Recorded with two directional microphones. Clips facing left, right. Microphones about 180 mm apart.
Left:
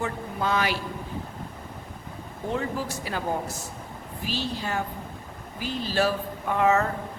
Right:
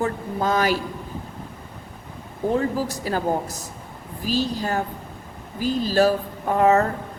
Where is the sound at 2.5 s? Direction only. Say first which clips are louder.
Right 5 dB; 40° right (ahead or behind).